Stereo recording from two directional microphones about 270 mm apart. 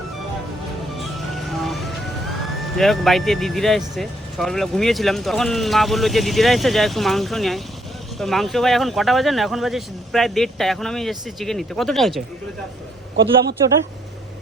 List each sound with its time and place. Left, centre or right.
1.6 s music: centre
2.7 s speech: centre
13.1 s a man's voice: right